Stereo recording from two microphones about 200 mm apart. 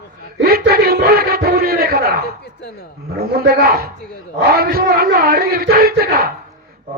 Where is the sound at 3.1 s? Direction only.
50° right (ahead or behind).